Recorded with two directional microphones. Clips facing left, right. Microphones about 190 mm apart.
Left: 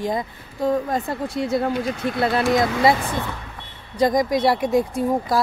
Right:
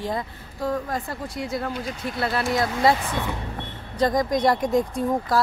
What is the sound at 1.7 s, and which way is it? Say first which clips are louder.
Speech: left 6 dB; 65° left (ahead or behind).